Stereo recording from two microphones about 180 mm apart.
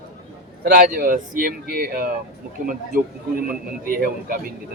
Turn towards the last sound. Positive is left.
turn(degrees=-50)  # may be behind; listen again after turning